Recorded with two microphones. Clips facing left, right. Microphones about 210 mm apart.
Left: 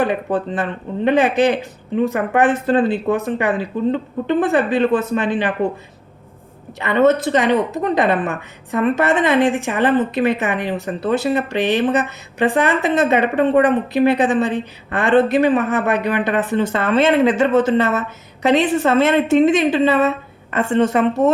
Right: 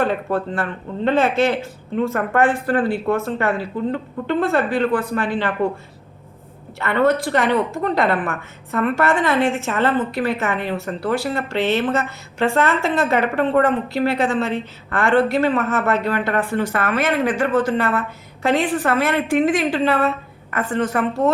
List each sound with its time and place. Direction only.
0.0 s a woman's voice: 15° left (ahead or behind)
6.7 s a woman's voice: 20° left (ahead or behind)